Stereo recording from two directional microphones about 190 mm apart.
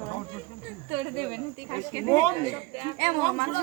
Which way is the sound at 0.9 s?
25° right (ahead or behind).